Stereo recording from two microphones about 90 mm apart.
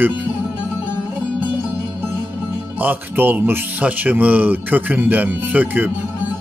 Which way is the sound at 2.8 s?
20° right (ahead or behind).